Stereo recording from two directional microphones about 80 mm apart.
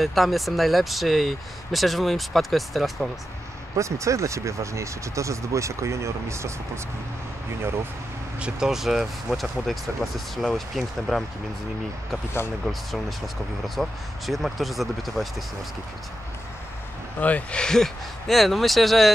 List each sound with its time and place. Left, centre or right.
0.0 s speech: centre
3.7 s speech: right
8.4 s speech: centre
13.7 s speech: centre
17.2 s speech: centre